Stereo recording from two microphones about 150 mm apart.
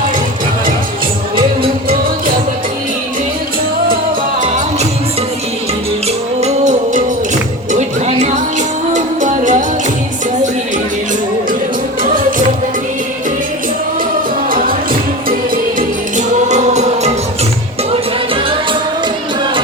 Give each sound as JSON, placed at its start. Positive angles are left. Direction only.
{"t": 6.4, "sound": "music", "side_deg": -50}
{"t": 16.1, "sound": "music", "side_deg": -50}